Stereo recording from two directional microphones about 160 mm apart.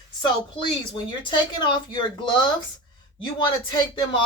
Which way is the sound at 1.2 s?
30° left (ahead or behind).